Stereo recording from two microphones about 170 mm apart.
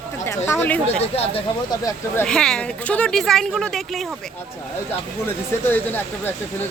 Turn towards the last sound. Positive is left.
turn(degrees=10)  # may be behind; listen again after turning